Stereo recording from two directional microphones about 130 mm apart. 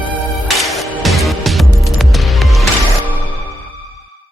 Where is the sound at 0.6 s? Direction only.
Centre (ahead or behind).